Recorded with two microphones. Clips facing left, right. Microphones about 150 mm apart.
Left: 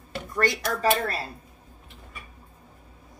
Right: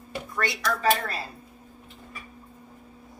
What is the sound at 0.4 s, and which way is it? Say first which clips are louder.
Speech: left 3 dB; 45° left (ahead or behind).